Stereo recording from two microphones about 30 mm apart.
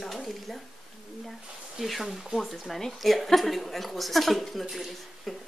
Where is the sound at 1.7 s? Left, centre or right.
Centre.